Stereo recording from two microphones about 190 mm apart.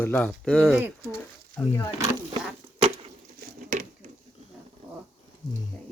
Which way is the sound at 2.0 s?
15° right (ahead or behind).